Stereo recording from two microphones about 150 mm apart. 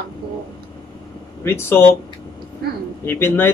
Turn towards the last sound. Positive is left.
turn(degrees=15)  # may be behind; listen again after turning